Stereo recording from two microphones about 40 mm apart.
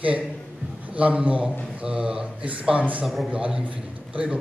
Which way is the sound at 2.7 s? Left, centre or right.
Right.